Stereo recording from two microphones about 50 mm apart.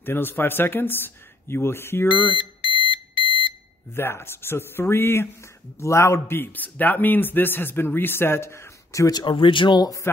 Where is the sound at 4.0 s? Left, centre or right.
Left.